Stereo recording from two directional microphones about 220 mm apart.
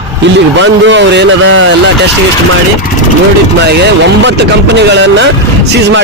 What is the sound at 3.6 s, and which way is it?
A man's voice, 50° right (ahead or behind).